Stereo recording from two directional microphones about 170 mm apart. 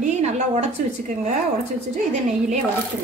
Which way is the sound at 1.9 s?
45° right (ahead or behind).